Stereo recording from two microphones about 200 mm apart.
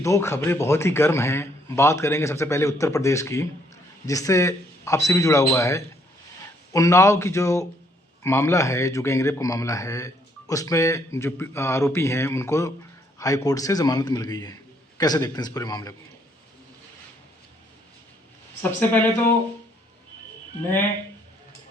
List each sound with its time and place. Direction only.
0.0 s a man's voice: 15° left (ahead or behind)
18.6 s speech: 10° left (ahead or behind)